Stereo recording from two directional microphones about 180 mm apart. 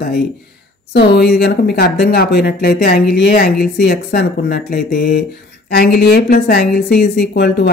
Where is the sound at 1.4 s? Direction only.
60° left (ahead or behind).